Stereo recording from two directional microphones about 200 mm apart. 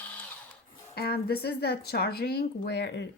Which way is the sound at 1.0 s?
50° left (ahead or behind).